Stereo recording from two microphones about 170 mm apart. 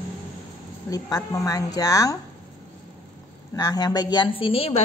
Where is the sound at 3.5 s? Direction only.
20° left (ahead or behind).